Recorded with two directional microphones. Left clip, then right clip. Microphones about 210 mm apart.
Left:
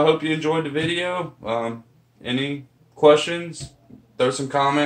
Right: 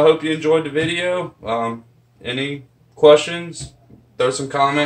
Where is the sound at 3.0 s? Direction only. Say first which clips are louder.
Right 4 dB; 15° left (ahead or behind).